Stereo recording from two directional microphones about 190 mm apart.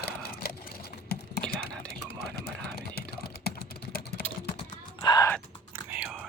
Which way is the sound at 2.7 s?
55° left (ahead or behind).